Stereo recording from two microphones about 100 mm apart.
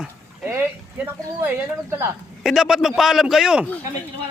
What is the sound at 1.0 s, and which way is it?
Speech, 20° right (ahead or behind).